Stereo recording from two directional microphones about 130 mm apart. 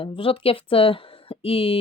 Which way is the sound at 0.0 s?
45° left (ahead or behind).